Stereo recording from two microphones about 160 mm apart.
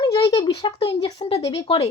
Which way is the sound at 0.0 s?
35° left (ahead or behind).